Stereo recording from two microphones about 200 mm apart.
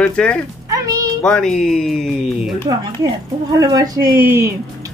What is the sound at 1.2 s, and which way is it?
Speech, 5° left (ahead or behind).